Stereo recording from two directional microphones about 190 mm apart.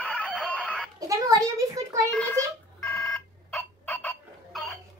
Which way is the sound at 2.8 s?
15° left (ahead or behind).